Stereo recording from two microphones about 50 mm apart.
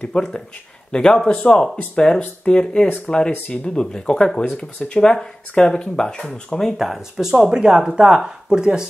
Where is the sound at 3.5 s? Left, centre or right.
Centre.